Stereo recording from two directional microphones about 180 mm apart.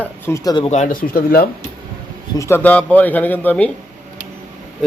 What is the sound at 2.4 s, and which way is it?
Speech, 10° left (ahead or behind).